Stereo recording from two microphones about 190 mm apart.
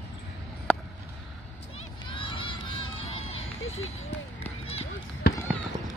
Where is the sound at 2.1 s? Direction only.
25° left (ahead or behind).